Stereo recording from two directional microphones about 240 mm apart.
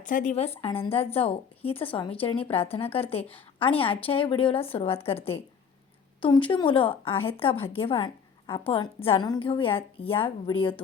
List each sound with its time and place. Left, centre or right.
0.0 s speech: left